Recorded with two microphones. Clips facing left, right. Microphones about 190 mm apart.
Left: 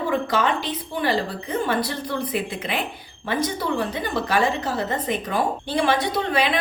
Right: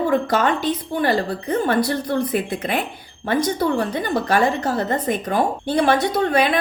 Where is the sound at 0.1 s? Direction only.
45° right (ahead or behind).